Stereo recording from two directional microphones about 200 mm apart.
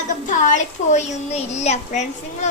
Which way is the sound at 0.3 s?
40° left (ahead or behind).